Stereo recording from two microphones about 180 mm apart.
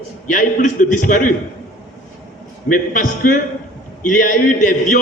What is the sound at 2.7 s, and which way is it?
A man's voice, 50° left (ahead or behind).